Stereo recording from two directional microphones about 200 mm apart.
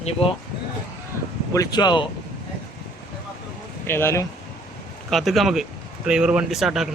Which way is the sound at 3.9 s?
10° left (ahead or behind).